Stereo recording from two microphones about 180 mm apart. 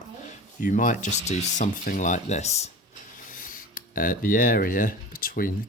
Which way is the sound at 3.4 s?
50° left (ahead or behind).